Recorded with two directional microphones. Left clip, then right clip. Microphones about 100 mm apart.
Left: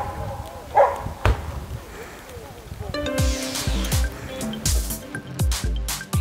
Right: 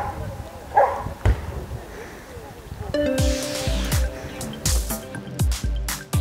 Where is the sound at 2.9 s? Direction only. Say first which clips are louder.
Right 4 dB; centre (ahead or behind).